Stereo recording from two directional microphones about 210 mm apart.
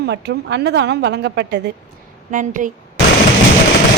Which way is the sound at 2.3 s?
40° right (ahead or behind).